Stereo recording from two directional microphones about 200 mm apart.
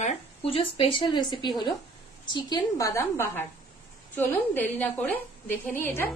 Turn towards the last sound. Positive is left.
turn(degrees=10)  # may be behind; listen again after turning